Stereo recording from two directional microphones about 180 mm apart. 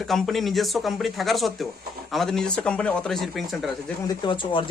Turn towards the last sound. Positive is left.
turn(degrees=25)  # may be behind; listen again after turning